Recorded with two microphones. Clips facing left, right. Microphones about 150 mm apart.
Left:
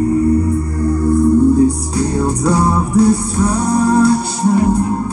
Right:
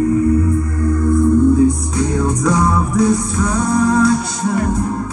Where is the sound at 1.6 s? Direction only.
35° left (ahead or behind).